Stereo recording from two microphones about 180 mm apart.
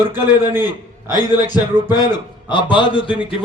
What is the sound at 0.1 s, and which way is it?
Speech, 20° left (ahead or behind).